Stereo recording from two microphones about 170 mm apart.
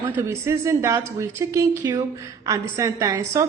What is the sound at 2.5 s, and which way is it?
Speech, 20° right (ahead or behind).